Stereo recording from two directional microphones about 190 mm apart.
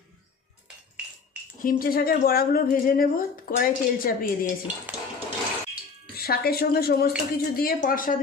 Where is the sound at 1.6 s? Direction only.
50° left (ahead or behind).